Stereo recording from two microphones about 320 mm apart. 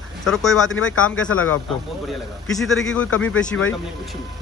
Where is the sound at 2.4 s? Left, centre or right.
Centre.